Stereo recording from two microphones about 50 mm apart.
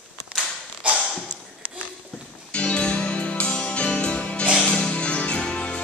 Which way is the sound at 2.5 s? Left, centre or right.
Left.